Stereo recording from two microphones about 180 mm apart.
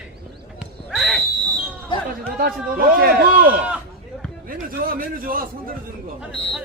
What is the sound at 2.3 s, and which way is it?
A man's voice, 55° right (ahead or behind).